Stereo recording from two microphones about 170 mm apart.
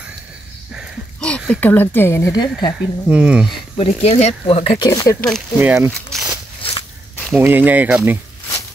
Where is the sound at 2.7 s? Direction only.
5° right (ahead or behind).